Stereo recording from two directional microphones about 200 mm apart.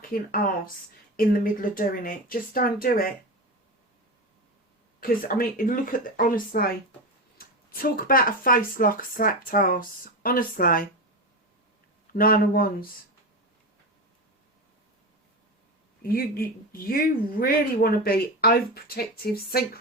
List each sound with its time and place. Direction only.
0.1 s speech: 45° left (ahead or behind)
4.9 s speech: 45° left (ahead or behind)
12.1 s speech: 45° left (ahead or behind)
16.0 s speech: 50° left (ahead or behind)